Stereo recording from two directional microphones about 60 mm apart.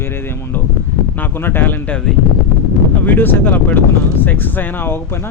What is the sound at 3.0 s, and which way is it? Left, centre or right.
Speech, left.